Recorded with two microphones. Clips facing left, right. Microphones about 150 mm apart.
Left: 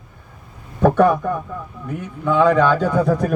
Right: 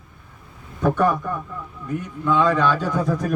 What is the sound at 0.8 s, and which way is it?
Speech, 65° left (ahead or behind).